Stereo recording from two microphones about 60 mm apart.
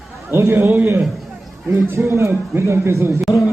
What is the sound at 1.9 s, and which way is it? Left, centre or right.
Speech, right.